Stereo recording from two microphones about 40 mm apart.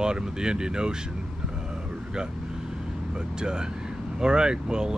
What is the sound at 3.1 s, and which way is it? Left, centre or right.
Speech, centre.